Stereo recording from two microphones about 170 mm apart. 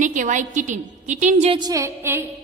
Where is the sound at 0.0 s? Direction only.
50° right (ahead or behind).